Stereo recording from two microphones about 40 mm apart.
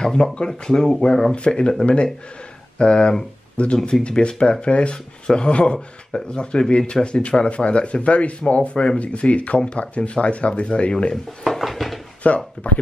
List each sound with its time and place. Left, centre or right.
0.0 s speech: left
0.5 s speech: centre
11.4 s dishes: centre
12.2 s speech: left